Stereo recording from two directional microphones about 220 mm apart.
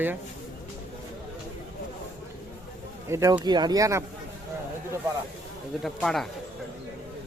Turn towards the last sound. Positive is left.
turn(degrees=0)  # may be behind; listen again after turning